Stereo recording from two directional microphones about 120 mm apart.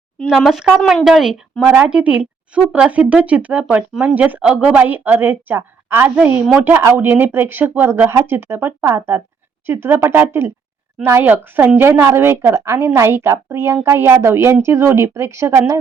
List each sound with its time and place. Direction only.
0.2 s a woman's voice: centre (ahead or behind); by 15.8 s 20° right (ahead or behind)